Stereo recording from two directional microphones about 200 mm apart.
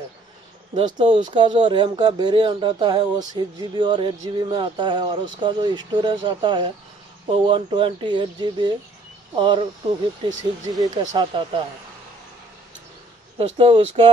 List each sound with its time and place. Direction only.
0.7 s speech: 25° right (ahead or behind)
13.4 s speech: 30° right (ahead or behind)